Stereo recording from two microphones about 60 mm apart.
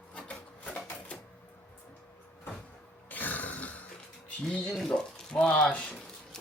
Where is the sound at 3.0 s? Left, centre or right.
Left.